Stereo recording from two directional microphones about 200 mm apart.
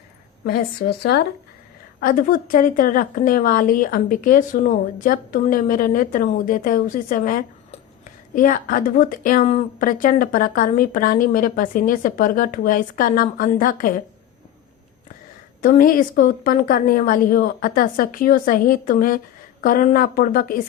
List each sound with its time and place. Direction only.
0.4 s speech: 50° left (ahead or behind)
15.6 s speech: 45° left (ahead or behind)